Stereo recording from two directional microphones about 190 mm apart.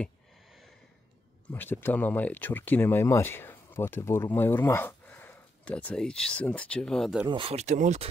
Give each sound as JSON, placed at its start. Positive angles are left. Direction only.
{"t": 0.0, "sound": "a sound", "side_deg": 0}
{"t": 1.5, "sound": "speech", "side_deg": 10}
{"t": 7.2, "sound": "speech", "side_deg": -30}